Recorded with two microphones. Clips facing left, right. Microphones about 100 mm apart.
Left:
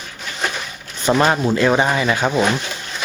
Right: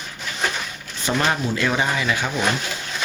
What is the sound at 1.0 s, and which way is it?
Speech, 40° left (ahead or behind).